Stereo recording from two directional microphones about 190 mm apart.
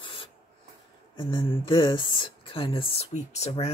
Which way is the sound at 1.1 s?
25° left (ahead or behind).